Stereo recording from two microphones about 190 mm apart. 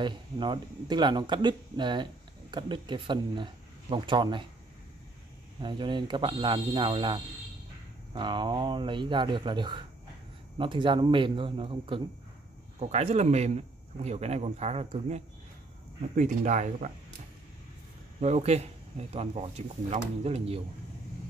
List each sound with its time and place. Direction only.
0.0 s speech: 25° right (ahead or behind)
5.6 s speech: 25° right (ahead or behind)
18.2 s speech: 35° right (ahead or behind)